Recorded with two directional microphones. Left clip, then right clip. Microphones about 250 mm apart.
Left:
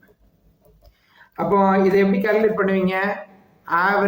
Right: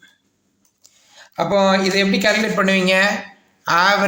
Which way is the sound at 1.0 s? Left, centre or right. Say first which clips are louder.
Right 1 dB; right.